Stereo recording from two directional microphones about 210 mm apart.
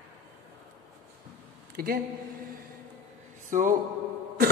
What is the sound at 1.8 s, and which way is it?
Speech, 45° right (ahead or behind).